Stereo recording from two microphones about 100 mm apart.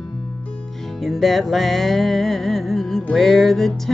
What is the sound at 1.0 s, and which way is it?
Music, centre (ahead or behind).